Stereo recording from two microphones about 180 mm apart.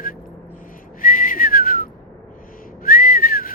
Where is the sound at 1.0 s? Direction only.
50° left (ahead or behind).